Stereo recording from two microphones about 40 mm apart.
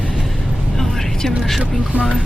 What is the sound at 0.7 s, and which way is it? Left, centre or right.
Vehicle, centre.